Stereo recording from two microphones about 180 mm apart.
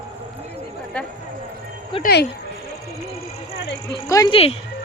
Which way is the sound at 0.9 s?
5° left (ahead or behind).